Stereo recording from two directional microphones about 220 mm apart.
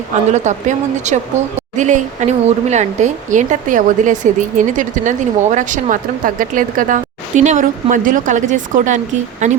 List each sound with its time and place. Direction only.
0.3 s speech: 30° right (ahead or behind)